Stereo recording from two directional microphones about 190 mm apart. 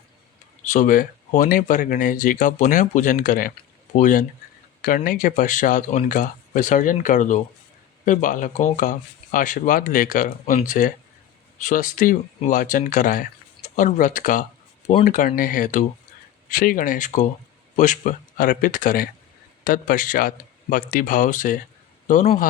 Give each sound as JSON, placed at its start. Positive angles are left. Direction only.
{"t": 0.7, "sound": "a man's voice", "side_deg": 45}